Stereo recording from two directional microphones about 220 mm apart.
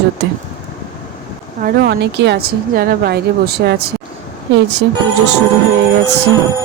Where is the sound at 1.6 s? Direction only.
50° right (ahead or behind).